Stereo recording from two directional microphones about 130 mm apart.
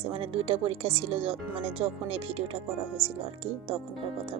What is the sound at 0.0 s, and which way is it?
Speech, 50° right (ahead or behind).